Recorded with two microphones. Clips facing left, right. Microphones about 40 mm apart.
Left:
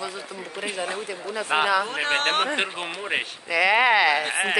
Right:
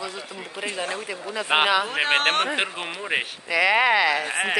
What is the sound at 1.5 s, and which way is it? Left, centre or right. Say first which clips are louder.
Speech: right 1 dB; right.